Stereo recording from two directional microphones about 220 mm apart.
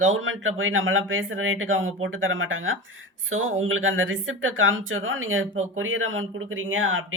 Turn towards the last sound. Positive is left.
turn(degrees=-60)  # may be behind; listen again after turning